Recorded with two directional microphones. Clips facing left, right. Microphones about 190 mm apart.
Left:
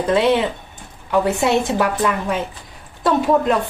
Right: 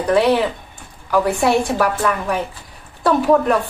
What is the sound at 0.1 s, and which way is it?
A woman's voice, 20° left (ahead or behind).